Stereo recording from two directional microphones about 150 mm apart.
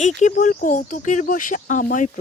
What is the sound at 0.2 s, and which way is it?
Speech, 55° left (ahead or behind).